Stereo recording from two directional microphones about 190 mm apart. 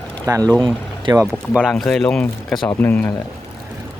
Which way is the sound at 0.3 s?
20° right (ahead or behind).